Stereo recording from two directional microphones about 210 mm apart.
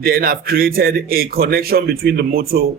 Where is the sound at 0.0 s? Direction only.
45° right (ahead or behind).